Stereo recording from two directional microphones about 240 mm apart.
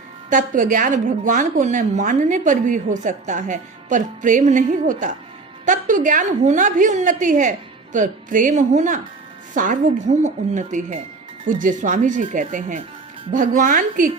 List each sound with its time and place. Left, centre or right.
0.3 s a woman's voice: right